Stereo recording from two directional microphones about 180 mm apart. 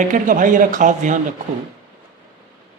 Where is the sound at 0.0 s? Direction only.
45° right (ahead or behind).